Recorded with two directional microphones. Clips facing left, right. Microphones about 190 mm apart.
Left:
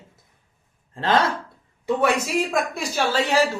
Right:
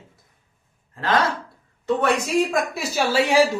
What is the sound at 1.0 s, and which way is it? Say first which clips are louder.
Speech: left 1 dB; 25° left (ahead or behind).